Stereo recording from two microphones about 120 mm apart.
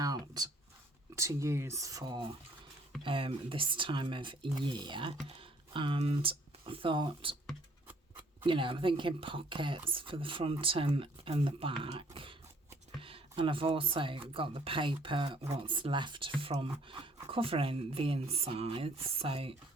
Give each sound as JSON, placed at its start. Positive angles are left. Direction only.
{"t": 0.0, "sound": "a sound", "side_deg": -30}
{"t": 1.1, "sound": "speech", "side_deg": -25}
{"t": 3.0, "sound": "speech", "side_deg": -45}
{"t": 8.4, "sound": "speech", "side_deg": -45}